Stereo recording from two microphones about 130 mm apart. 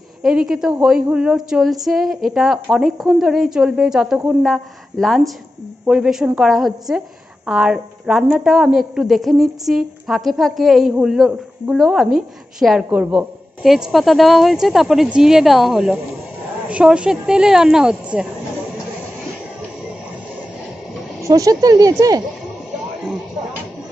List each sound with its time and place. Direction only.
0.2 s a woman's voice: 5° right (ahead or behind)
21.3 s speech: 30° right (ahead or behind)